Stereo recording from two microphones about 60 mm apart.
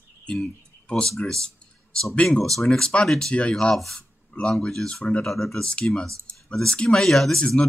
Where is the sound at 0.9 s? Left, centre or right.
Centre.